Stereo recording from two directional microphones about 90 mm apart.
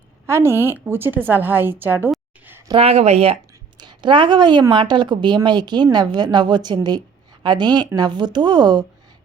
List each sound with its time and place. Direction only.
0.3 s a woman's voice: 30° right (ahead or behind)
2.7 s speech: 90° right
3.8 s a woman's voice: 55° right (ahead or behind)